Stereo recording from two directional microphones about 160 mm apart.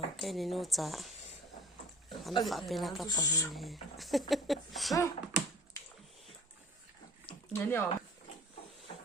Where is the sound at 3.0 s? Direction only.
20° left (ahead or behind).